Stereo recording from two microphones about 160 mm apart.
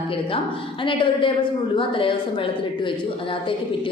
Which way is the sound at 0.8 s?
30° left (ahead or behind).